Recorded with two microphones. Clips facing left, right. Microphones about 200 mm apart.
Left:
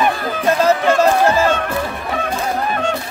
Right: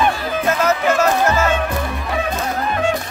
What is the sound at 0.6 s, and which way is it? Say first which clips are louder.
Music: left 4 dB; 30° left (ahead or behind).